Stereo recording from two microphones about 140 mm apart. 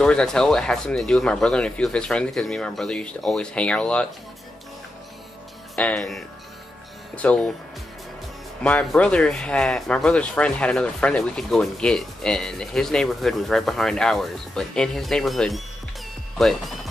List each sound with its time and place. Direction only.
0.0 s speech: 5° left (ahead or behind)
5.8 s speech: 5° left (ahead or behind)
8.6 s speech: 10° left (ahead or behind)